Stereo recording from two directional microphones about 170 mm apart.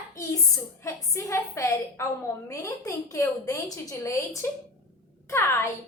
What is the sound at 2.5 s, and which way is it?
A woman's voice, 20° left (ahead or behind).